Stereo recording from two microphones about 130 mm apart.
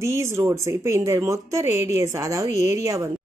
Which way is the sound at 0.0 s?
20° right (ahead or behind).